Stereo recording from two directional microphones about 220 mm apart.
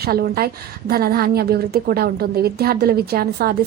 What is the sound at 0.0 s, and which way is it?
Speech, 45° right (ahead or behind).